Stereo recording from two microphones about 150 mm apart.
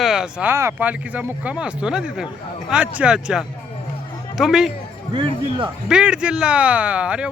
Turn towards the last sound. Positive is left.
turn(degrees=-10)  # may be behind; listen again after turning